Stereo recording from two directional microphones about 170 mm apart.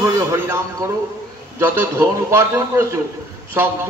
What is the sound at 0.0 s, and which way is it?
A man's voice, 15° right (ahead or behind).